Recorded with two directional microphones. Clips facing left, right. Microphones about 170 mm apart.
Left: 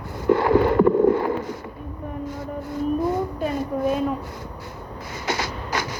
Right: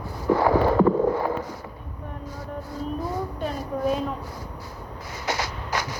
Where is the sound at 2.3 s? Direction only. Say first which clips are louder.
Left 4 dB; 20° left (ahead or behind).